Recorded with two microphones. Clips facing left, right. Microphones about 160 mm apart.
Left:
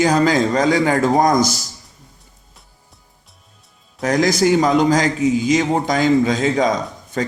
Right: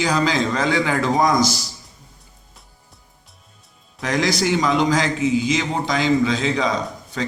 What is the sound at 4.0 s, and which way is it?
A man's voice, 45° left (ahead or behind).